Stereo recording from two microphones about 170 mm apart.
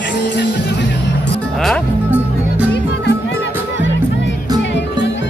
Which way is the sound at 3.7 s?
90° left.